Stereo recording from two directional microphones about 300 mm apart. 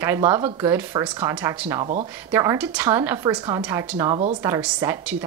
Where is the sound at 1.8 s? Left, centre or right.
Centre.